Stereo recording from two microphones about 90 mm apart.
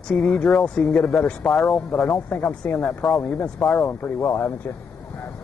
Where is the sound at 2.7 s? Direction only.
20° left (ahead or behind).